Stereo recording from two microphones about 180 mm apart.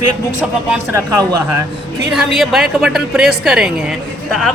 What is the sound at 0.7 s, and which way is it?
Speech, 15° right (ahead or behind).